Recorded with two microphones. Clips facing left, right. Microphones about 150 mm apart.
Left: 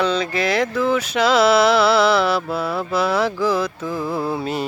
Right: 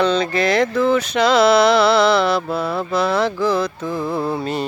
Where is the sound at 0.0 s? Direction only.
5° left (ahead or behind).